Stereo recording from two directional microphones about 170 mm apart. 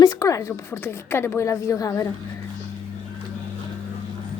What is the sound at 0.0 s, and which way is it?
A woman's voice, 20° left (ahead or behind).